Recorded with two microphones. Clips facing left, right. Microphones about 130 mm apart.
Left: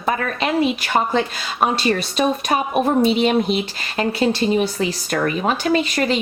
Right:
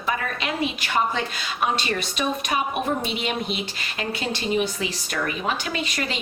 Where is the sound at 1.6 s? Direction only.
35° left (ahead or behind).